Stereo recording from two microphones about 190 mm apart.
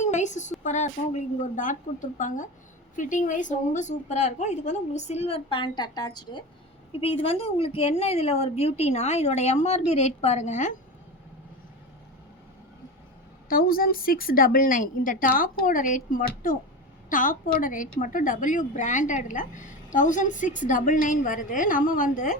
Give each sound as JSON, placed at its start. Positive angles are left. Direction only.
{"t": 0.0, "sound": "a woman's voice", "side_deg": 40}
{"t": 13.5, "sound": "a woman's voice", "side_deg": 50}